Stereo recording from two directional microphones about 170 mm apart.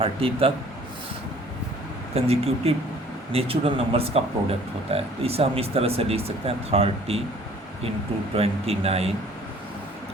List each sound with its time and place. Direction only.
0.0 s speech: 35° right (ahead or behind)
2.1 s speech: 35° right (ahead or behind)
8.3 s speech: 35° right (ahead or behind)